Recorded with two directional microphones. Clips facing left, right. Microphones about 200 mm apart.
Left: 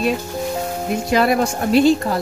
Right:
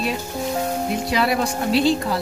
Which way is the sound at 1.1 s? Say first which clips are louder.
Left 6 dB; 45° left (ahead or behind).